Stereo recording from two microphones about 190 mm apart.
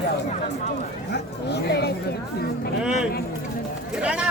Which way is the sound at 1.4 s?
60° left (ahead or behind).